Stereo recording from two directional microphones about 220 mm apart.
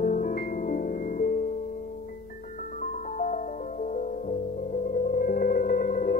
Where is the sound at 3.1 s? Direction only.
35° left (ahead or behind).